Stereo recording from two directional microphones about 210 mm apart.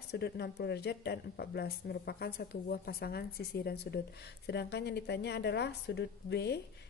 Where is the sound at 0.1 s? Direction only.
50° left (ahead or behind).